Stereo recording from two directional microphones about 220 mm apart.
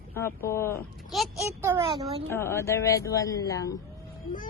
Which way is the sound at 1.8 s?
25° right (ahead or behind).